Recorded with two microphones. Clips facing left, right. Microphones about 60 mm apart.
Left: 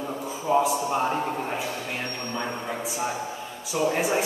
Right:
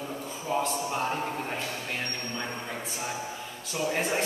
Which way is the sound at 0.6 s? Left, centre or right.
Centre.